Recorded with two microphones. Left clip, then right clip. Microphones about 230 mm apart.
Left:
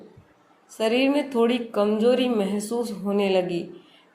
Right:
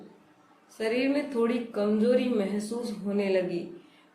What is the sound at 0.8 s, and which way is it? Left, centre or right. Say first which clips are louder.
A woman's voice: left 6 dB; left.